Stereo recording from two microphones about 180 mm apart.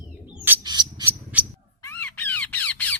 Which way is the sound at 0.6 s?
25° right (ahead or behind).